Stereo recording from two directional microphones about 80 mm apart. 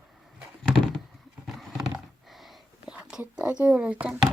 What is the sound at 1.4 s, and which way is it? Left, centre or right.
Horse, centre.